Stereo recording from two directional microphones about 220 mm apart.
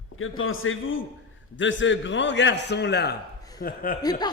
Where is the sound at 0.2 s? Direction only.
65° left (ahead or behind); by 3.9 s 40° left (ahead or behind).